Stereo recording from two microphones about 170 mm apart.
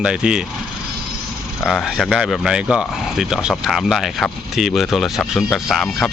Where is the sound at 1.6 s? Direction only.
Centre (ahead or behind).